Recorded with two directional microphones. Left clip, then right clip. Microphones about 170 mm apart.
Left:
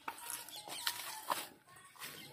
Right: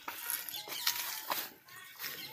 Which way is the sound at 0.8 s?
10° right (ahead or behind).